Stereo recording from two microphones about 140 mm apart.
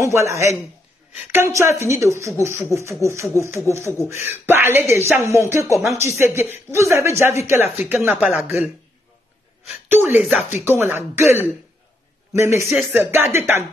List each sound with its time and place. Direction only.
0.0 s speech: 20° right (ahead or behind); by 8.6 s 5° right (ahead or behind)
9.8 s speech: 15° right (ahead or behind)
12.6 s speech: centre (ahead or behind)
13.1 s speech: 15° right (ahead or behind)